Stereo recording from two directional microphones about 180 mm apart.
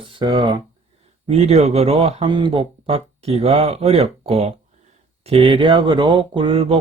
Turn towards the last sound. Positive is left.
turn(degrees=-30)  # may be behind; listen again after turning